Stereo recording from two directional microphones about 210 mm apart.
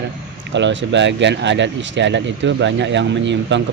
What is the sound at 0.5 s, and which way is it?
Speech, 60° right (ahead or behind).